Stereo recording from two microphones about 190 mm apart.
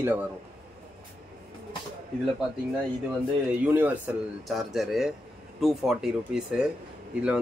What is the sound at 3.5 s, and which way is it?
Speech, 10° right (ahead or behind).